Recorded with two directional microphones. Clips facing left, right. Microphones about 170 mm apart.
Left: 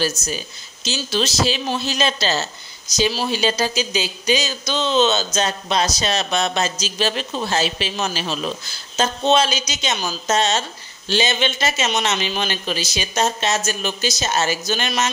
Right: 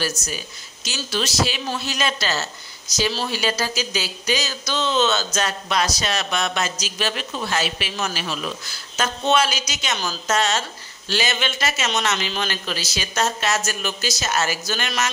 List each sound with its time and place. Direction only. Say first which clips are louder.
0.8 s speech: left 4 dB; 25° left (ahead or behind)